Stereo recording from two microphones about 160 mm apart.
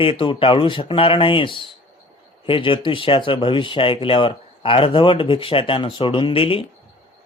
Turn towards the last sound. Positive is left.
turn(degrees=35)  # may be behind; listen again after turning